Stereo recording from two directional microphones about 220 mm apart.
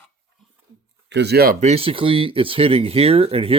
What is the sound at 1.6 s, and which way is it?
Speech, 25° right (ahead or behind).